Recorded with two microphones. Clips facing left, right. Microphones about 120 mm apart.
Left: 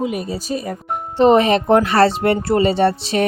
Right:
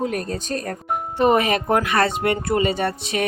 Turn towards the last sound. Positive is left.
turn(degrees=30)  # may be behind; listen again after turning